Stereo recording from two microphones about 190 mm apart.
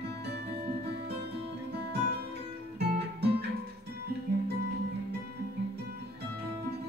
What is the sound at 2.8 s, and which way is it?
Guitar, 60° right (ahead or behind).